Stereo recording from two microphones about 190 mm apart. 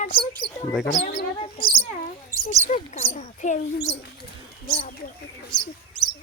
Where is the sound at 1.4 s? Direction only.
30° left (ahead or behind).